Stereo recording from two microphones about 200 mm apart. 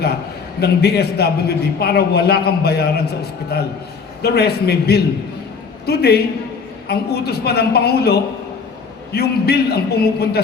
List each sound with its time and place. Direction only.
0.6 s a man's voice: 55° left (ahead or behind)